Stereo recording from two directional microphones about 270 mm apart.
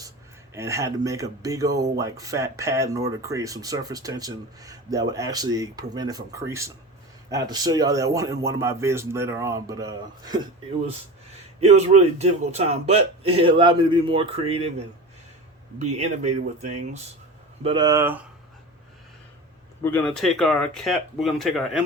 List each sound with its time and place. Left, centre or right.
0.5 s speech: centre
11.6 s a man's voice: right
15.8 s a man's voice: right; by 18.2 s centre
19.8 s speech: centre